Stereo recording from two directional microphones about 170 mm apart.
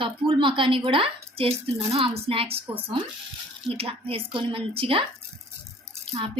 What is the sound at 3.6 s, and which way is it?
Speech, 35° right (ahead or behind).